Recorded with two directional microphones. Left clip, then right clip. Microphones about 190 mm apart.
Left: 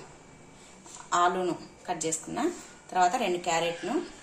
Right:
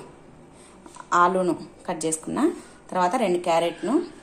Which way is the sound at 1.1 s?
40° right (ahead or behind).